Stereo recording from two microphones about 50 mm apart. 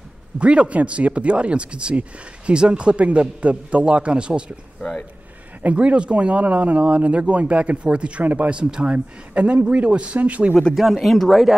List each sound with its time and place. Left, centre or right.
0.4 s speech: right
5.6 s speech: right
8.5 s speech: centre
10.7 s speech: centre